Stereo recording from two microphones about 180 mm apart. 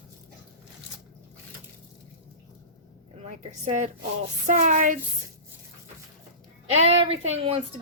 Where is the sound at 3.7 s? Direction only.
40° right (ahead or behind).